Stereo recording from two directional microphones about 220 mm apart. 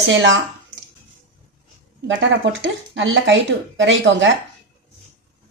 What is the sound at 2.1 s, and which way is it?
A woman's voice, 60° right (ahead or behind).